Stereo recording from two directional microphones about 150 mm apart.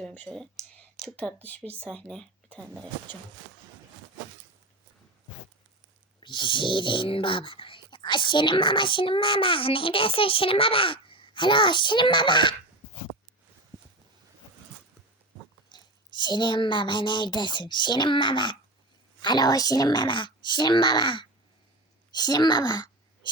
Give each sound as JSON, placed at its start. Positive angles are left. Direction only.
{"t": 0.0, "sound": "speech", "side_deg": 10}
{"t": 6.1, "sound": "speech", "side_deg": 30}
{"t": 15.7, "sound": "speech", "side_deg": 30}